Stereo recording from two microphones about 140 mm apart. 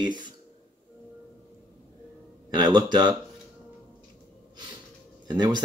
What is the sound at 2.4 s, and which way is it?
Speech, 30° right (ahead or behind).